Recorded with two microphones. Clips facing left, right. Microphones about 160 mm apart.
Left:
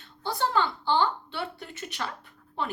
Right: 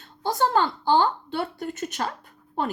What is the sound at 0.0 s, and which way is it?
A woman's voice, 45° right (ahead or behind).